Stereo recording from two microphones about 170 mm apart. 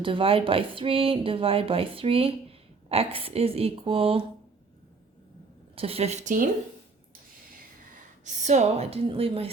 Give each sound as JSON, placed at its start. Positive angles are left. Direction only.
{"t": 0.0, "sound": "speech", "side_deg": -30}
{"t": 5.7, "sound": "speech", "side_deg": -35}
{"t": 8.2, "sound": "speech", "side_deg": -45}